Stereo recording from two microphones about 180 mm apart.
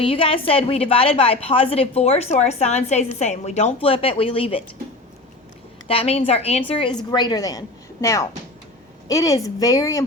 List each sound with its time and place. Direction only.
0.0 s a woman's voice: 30° left (ahead or behind)
5.9 s a woman's voice: 35° left (ahead or behind); by 10.1 s 20° left (ahead or behind)